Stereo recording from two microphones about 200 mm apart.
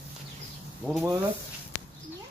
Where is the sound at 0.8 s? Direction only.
5° right (ahead or behind).